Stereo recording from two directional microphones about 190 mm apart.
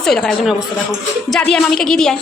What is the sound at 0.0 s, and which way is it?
Speech, 5° left (ahead or behind).